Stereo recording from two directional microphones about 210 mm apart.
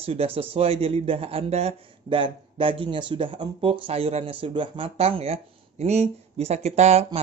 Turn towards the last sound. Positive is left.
turn(degrees=-30)  # may be behind; listen again after turning